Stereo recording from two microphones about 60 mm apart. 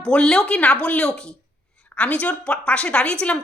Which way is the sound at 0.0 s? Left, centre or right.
Centre.